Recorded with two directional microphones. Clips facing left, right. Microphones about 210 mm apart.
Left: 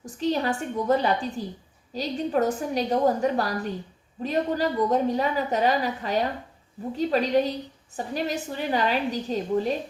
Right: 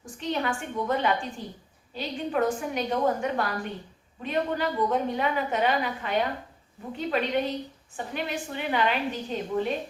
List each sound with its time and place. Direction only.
0.0 s a woman's voice: 35° left (ahead or behind)